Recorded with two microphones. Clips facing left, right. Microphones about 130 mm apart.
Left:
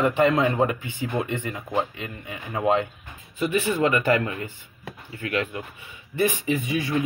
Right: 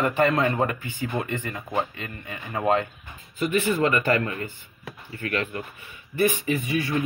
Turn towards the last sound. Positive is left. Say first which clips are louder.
# even
turn(degrees=20)  # may be behind; listen again after turning